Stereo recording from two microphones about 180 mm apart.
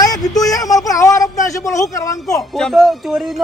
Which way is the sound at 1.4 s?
15° left (ahead or behind).